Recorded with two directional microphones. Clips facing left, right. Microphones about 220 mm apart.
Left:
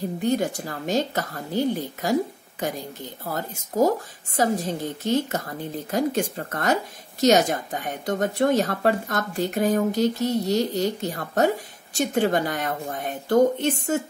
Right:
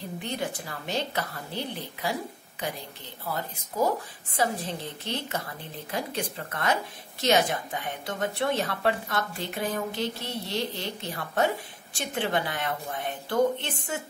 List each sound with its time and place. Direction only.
0.2 s a woman's voice: 40° left (ahead or behind)
3.3 s a woman's voice: 45° left (ahead or behind)